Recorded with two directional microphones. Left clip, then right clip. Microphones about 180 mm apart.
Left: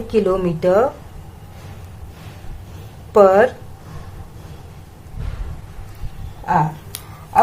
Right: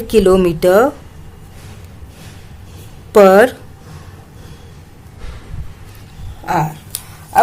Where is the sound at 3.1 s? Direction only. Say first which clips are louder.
Right 4 dB; 45° right (ahead or behind).